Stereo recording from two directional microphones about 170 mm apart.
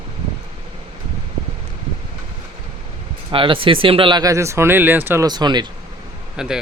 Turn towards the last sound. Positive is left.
turn(degrees=-5)  # may be behind; listen again after turning